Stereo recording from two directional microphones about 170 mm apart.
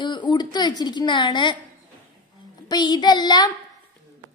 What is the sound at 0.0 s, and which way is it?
Speech, 25° left (ahead or behind).